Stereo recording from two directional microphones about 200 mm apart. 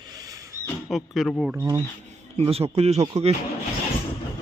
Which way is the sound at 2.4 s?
30° right (ahead or behind).